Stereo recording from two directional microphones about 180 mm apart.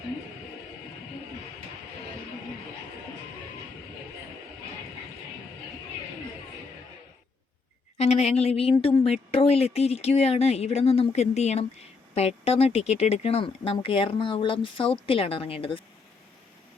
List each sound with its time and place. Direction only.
7.9 s speech: 35° left (ahead or behind)